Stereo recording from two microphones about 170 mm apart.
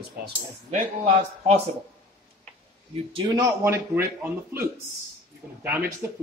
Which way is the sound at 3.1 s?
20° right (ahead or behind).